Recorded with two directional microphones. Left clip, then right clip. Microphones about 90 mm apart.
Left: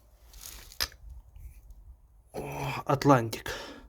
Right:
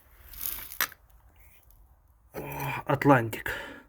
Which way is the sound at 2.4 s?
35° left (ahead or behind).